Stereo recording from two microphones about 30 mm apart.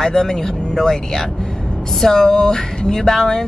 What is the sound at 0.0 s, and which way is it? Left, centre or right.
Speech, centre.